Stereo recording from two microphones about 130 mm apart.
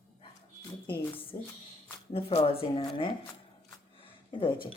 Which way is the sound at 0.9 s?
15° left (ahead or behind).